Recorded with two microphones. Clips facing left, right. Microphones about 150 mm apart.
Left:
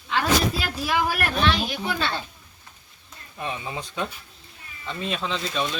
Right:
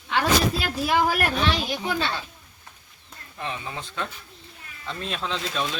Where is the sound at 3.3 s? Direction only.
15° left (ahead or behind).